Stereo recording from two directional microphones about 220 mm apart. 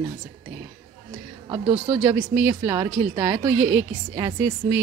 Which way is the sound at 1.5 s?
20° right (ahead or behind).